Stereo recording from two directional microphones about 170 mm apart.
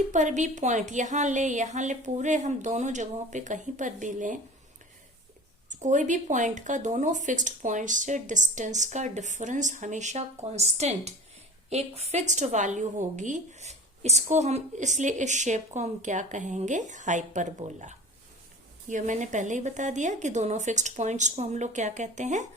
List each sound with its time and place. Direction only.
0.1 s a woman's voice: 45° right (ahead or behind)
5.6 s a woman's voice: 45° right (ahead or behind)